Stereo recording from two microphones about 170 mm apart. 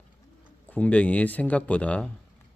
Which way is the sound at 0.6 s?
10° left (ahead or behind).